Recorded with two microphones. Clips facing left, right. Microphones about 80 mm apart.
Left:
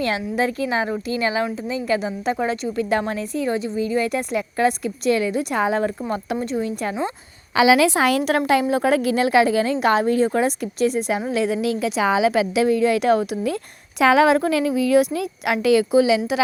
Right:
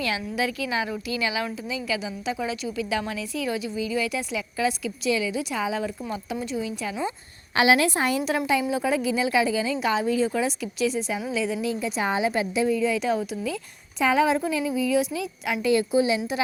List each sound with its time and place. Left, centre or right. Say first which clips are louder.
0.0 s a woman's voice: left 5 dB; left
7.9 s a woman's voice: left 6 dB; left
11.3 s a woman's voice: left 5 dB; left
14.0 s a woman's voice: left 6 dB; left